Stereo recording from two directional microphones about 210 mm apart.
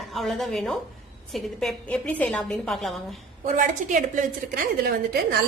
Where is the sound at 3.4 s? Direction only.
40° right (ahead or behind).